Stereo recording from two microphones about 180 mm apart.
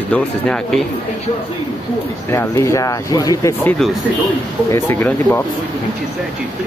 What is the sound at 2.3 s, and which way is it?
Speech, 15° left (ahead or behind).